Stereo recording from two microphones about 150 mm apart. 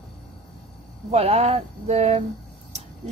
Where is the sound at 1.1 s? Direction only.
45° right (ahead or behind).